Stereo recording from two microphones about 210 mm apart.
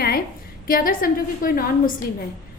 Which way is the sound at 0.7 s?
45° left (ahead or behind).